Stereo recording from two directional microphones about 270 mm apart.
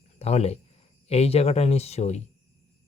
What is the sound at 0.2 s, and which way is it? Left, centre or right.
Speech, left.